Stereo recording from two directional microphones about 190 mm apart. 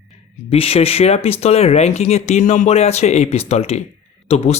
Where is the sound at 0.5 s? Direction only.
30° left (ahead or behind).